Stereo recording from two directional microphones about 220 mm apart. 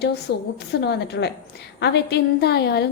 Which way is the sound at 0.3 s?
50° left (ahead or behind).